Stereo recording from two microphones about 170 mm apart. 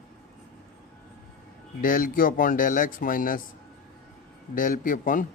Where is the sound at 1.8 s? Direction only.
55° left (ahead or behind).